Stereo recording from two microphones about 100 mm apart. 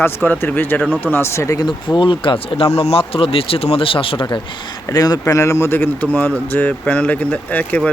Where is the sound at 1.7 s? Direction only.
50° left (ahead or behind).